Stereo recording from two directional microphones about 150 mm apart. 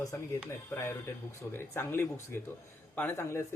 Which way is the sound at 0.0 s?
20° left (ahead or behind).